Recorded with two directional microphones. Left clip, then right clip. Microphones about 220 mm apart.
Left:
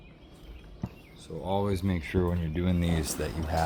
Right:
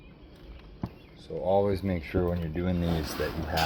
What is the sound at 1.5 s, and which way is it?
Speech, 35° left (ahead or behind).